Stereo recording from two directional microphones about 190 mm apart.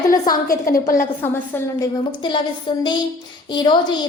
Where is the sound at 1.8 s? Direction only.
25° left (ahead or behind).